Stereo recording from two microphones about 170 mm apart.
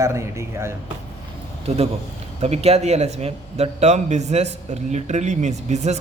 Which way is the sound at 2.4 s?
40° right (ahead or behind).